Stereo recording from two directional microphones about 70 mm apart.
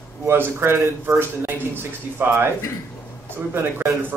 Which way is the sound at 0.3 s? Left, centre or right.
Right.